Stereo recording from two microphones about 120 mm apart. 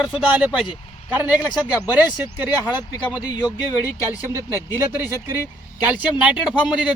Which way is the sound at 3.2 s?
35° left (ahead or behind).